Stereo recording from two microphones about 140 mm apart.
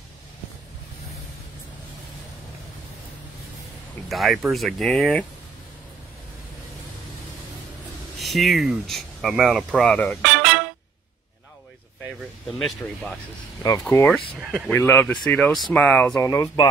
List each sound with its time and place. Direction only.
4.1 s speech: centre (ahead or behind)
8.2 s speech: centre (ahead or behind)
9.8 s music: 10° left (ahead or behind)
12.5 s speech: 5° left (ahead or behind)
16.3 s speech: 25° left (ahead or behind)